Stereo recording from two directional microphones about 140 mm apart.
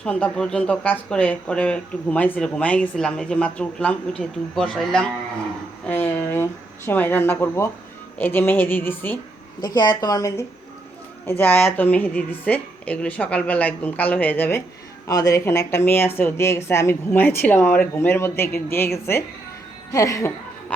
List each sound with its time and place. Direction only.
0.0 s speech: 10° left (ahead or behind)
5.9 s speech: 15° left (ahead or behind)
9.6 s a woman's voice: 30° left (ahead or behind); by 14.6 s 15° left (ahead or behind)
15.0 s a woman's voice: 25° left (ahead or behind)